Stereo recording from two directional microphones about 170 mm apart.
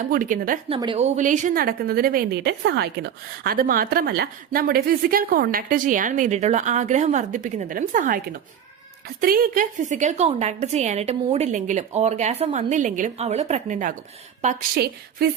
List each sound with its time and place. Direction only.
0.0 s a woman's voice: 50° right (ahead or behind)